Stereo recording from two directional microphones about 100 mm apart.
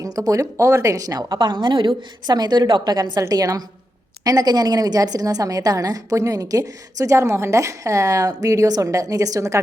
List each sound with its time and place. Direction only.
0.0 s a woman's voice: 35° right (ahead or behind)